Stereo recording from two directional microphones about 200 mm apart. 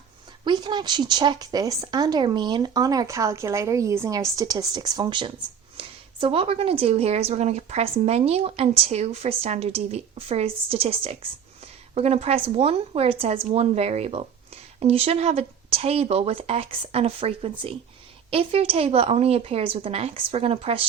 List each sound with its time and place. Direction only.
0.4 s a woman's voice: 20° right (ahead or behind)